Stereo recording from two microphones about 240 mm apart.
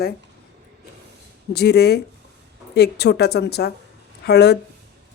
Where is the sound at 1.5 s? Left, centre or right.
Left.